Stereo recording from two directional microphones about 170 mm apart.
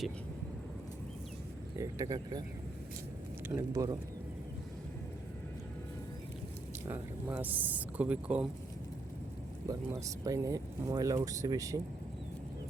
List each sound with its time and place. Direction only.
1.8 s speech: 20° right (ahead or behind)
3.5 s speech: 20° right (ahead or behind)
6.8 s a woman's voice: 15° right (ahead or behind)
9.7 s a woman's voice: 20° right (ahead or behind)